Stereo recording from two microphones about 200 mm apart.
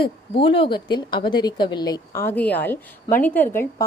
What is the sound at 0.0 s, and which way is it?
A woman's voice, 25° left (ahead or behind).